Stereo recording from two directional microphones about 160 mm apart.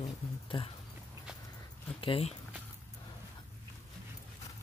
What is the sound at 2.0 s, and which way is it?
Speech, 35° left (ahead or behind).